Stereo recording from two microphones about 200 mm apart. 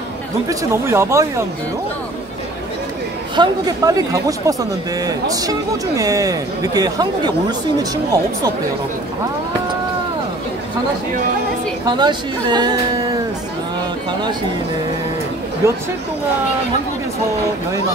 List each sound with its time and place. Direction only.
0.5 s speech: 15° right (ahead or behind)
3.3 s speech: 20° right (ahead or behind)
12.0 s speech: 20° right (ahead or behind)
15.6 s speech: 15° right (ahead or behind)